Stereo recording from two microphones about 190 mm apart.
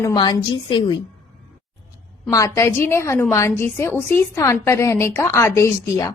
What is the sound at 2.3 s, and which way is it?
Speech, 15° left (ahead or behind).